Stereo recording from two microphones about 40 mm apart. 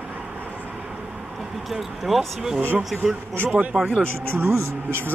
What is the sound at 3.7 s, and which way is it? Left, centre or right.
Speech, right.